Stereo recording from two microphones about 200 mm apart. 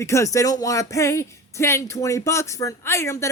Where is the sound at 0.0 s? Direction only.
15° left (ahead or behind).